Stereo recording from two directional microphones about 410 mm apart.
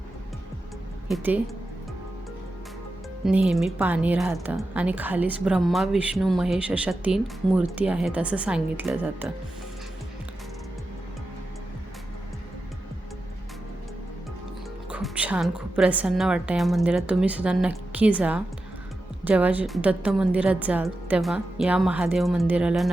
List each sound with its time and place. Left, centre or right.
1.0 s speech: centre
3.2 s speech: centre
14.8 s speech: centre